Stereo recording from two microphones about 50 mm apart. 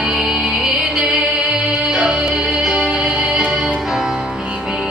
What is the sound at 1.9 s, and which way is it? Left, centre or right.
Music, centre.